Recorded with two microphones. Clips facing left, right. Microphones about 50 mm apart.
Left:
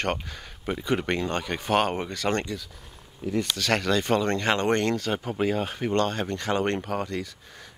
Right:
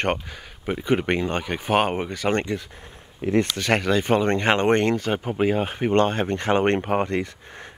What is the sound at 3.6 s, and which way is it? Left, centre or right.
Speech, right.